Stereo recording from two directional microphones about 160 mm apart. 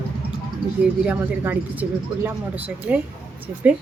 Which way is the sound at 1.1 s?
10° right (ahead or behind).